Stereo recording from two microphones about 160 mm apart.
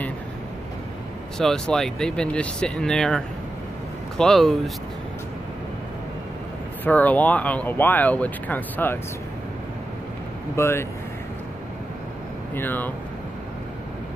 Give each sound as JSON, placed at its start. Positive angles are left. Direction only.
{"t": 1.4, "sound": "speech", "side_deg": 5}
{"t": 6.8, "sound": "speech", "side_deg": 10}
{"t": 10.5, "sound": "speech", "side_deg": 15}
{"t": 12.5, "sound": "speech", "side_deg": 10}